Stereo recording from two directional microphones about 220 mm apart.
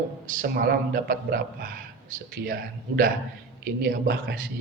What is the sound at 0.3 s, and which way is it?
A man's voice, 45° right (ahead or behind).